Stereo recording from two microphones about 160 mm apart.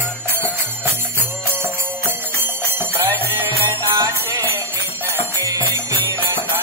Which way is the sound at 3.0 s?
20° right (ahead or behind).